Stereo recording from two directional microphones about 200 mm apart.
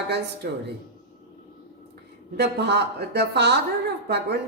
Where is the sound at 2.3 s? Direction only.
55° right (ahead or behind).